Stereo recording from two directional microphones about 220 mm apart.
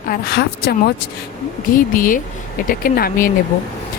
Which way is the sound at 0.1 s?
45° left (ahead or behind).